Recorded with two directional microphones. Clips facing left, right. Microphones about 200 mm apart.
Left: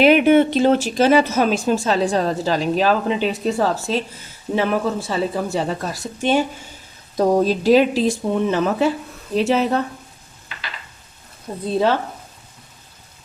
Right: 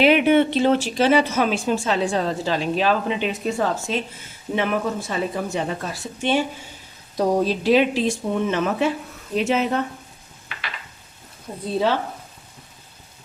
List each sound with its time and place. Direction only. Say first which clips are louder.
0.0 s speech: left 3 dB; 45° left (ahead or behind)